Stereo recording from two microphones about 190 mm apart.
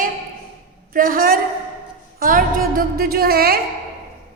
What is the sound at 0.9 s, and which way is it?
A woman's voice, 50° right (ahead or behind).